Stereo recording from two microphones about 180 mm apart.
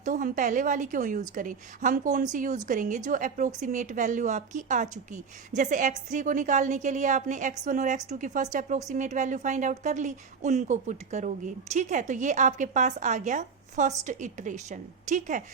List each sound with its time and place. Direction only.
0.0 s a woman's voice: 45° right (ahead or behind)